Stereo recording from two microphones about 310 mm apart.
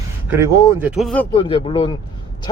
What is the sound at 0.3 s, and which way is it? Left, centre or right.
Speech, centre.